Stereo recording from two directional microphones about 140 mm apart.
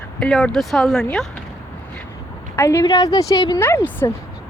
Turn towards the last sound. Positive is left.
turn(degrees=20)  # may be behind; listen again after turning